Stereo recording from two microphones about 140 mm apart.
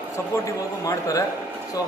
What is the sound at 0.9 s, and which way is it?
Speech, 20° left (ahead or behind).